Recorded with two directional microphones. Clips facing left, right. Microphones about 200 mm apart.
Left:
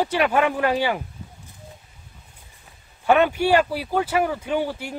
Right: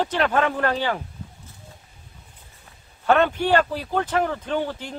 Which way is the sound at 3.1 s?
10° left (ahead or behind).